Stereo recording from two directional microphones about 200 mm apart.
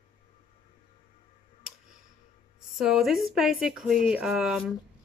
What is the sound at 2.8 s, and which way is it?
Speech, centre (ahead or behind).